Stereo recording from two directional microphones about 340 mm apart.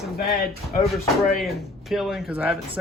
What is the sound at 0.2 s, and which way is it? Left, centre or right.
Speech, left.